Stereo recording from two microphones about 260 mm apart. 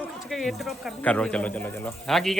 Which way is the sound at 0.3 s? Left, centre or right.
Centre.